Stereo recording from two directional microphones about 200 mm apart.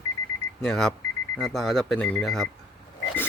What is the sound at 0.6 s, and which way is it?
Speech, centre (ahead or behind).